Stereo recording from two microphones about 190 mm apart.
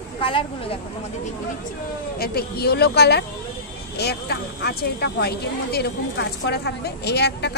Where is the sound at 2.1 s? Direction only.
55° left (ahead or behind).